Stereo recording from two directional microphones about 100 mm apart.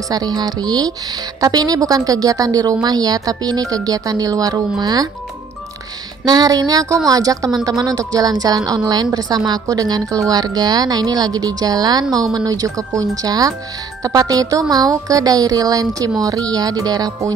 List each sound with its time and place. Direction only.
0.1 s a woman's voice: 40° right (ahead or behind)
6.2 s a woman's voice: 40° right (ahead or behind)